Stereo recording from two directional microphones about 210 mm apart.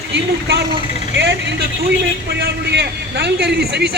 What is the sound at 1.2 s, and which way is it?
A man's voice, 55° right (ahead or behind).